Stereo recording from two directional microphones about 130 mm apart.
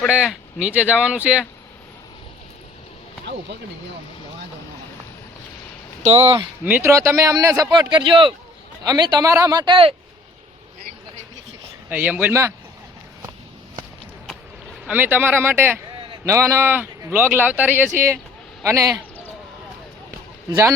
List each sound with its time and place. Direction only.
0.1 s speech: 10° right (ahead or behind)
6.0 s speech: 50° right (ahead or behind)
6.7 s speech: 15° right (ahead or behind); by 9.7 s 30° right (ahead or behind)
11.9 s speech: 10° right (ahead or behind)
14.8 s speech: 15° right (ahead or behind)